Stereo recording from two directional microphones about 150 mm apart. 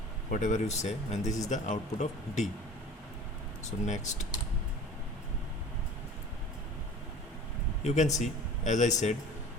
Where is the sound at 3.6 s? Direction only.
55° left (ahead or behind).